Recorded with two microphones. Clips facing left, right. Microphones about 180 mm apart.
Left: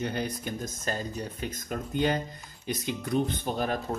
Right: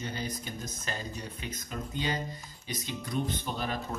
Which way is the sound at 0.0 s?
60° left (ahead or behind).